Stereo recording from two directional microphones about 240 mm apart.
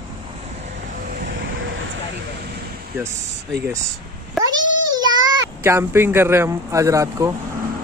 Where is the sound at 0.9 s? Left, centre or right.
Right.